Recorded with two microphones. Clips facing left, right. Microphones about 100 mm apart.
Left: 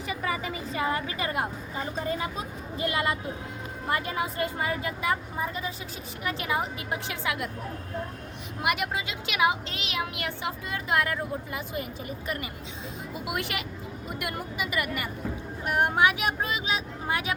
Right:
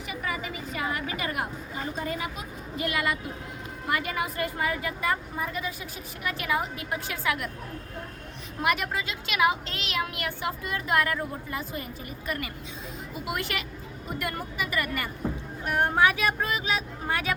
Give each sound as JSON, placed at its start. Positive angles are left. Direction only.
{"t": 0.7, "sound": "a woman's voice", "side_deg": 30}
{"t": 8.6, "sound": "a woman's voice", "side_deg": 15}